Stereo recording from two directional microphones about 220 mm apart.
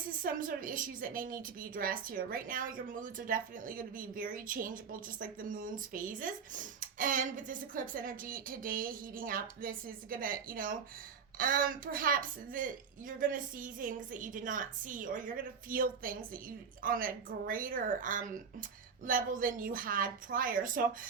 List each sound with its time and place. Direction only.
0.2 s a woman's voice: 40° right (ahead or behind)